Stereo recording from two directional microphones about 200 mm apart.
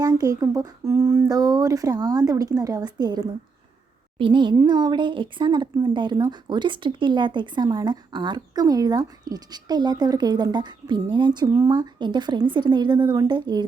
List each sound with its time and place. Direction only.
0.0 s speech: 20° right (ahead or behind)